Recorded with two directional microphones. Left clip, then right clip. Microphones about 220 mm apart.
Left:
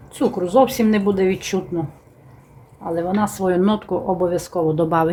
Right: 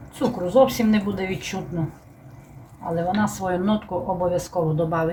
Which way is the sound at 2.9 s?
50° left (ahead or behind).